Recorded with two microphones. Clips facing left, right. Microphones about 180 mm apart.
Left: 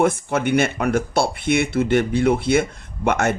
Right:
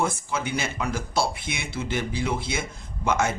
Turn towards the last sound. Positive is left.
turn(degrees=60)  # may be behind; listen again after turning